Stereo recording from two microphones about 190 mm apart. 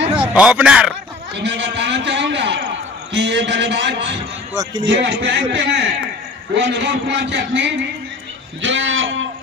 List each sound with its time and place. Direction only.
0.1 s speech: 5° right (ahead or behind)
1.3 s a man's voice: 65° right (ahead or behind)
8.6 s speech: 85° right